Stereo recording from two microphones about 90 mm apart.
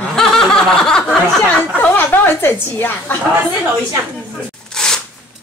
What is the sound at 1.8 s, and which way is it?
Speech, 20° left (ahead or behind).